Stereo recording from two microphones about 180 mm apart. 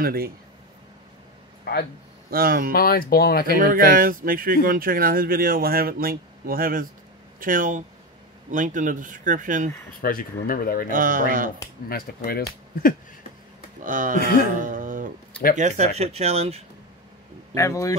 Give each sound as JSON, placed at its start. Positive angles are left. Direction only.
{"t": 0.0, "sound": "speech", "side_deg": -55}
{"t": 1.6, "sound": "a man's voice", "side_deg": 60}
{"t": 2.3, "sound": "speech", "side_deg": -55}
{"t": 2.7, "sound": "speech", "side_deg": 55}
{"t": 3.5, "sound": "speech", "side_deg": -50}
{"t": 10.0, "sound": "speech", "side_deg": 50}
{"t": 10.9, "sound": "speech", "side_deg": -50}
{"t": 11.9, "sound": "speech", "side_deg": 55}
{"t": 13.8, "sound": "speech", "side_deg": -45}
{"t": 17.6, "sound": "speech", "side_deg": 15}